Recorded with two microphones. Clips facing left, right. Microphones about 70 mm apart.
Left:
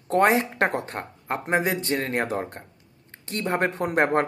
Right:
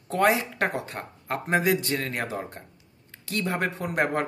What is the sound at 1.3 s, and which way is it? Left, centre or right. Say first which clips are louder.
Speech: even; left.